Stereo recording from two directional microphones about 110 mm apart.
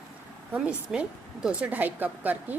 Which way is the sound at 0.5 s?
10° right (ahead or behind).